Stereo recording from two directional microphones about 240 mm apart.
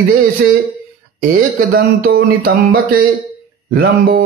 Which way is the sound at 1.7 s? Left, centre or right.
Right.